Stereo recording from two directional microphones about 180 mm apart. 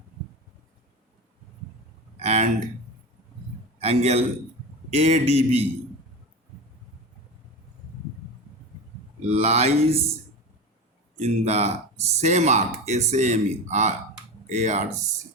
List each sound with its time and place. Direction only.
2.1 s a sound: 40° right (ahead or behind)
3.8 s a man's voice: 35° right (ahead or behind)
9.3 s speech: 35° right (ahead or behind)
11.2 s speech: 35° right (ahead or behind)